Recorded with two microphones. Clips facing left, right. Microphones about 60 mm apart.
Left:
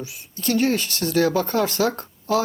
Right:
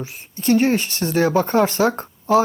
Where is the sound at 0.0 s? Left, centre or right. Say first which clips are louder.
Right 4 dB; right.